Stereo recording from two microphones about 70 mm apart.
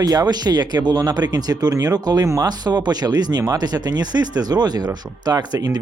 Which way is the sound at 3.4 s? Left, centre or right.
Right.